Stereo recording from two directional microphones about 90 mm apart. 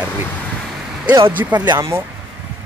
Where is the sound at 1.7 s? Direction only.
30° right (ahead or behind).